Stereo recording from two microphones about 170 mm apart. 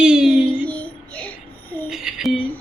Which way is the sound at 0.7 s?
10° left (ahead or behind).